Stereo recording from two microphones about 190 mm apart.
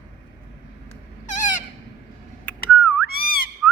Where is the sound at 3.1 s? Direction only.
50° left (ahead or behind).